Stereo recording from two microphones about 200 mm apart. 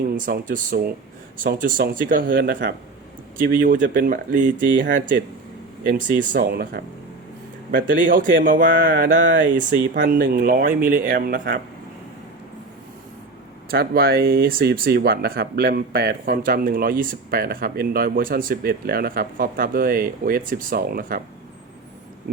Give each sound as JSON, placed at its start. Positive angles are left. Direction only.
{"t": 0.1, "sound": "speech", "side_deg": -45}
{"t": 13.7, "sound": "speech", "side_deg": -50}